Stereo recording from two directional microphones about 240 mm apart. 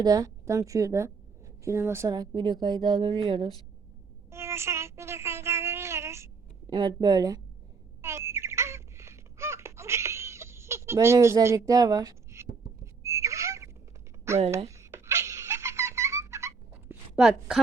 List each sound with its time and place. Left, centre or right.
0.0 s a woman's voice: centre
4.3 s a sound: centre
14.3 s speech: centre
14.7 s giggle: centre